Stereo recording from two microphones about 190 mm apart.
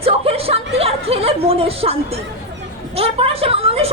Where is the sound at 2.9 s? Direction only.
30° right (ahead or behind).